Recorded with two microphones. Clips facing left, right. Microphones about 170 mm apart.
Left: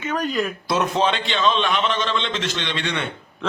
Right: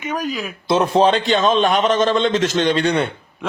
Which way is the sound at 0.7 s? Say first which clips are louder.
Right 8 dB; 30° right (ahead or behind).